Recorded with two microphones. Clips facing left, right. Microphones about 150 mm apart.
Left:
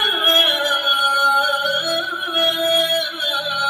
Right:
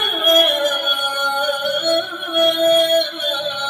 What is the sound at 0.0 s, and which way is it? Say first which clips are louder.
Music: right 5 dB; 40° right (ahead or behind).